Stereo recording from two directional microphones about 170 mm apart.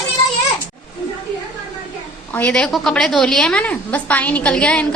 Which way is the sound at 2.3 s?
10° left (ahead or behind).